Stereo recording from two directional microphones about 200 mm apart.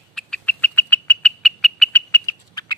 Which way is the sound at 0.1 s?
5° left (ahead or behind).